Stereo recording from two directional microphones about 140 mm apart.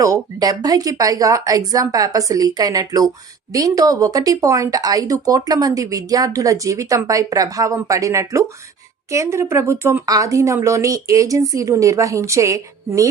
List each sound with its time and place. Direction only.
0.0 s speech: 25° right (ahead or behind)